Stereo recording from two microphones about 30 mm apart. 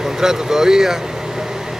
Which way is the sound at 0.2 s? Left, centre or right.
Centre.